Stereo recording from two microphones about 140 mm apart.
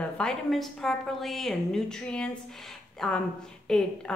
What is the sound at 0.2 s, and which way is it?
Speech, centre (ahead or behind).